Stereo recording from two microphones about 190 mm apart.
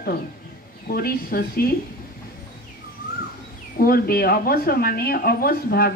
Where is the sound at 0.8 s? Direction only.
55° left (ahead or behind).